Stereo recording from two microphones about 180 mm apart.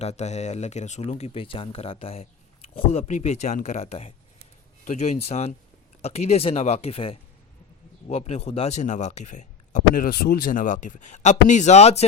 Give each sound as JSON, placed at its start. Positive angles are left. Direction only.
{"t": 0.0, "sound": "speech", "side_deg": 40}